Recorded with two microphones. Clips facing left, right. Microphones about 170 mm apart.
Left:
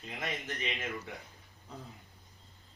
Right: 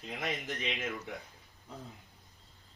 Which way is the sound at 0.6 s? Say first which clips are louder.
Even; 15° right (ahead or behind).